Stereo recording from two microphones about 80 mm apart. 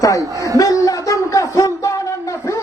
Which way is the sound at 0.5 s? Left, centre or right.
Left.